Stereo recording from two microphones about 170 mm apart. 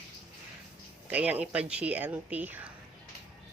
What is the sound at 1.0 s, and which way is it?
Speech, 10° right (ahead or behind).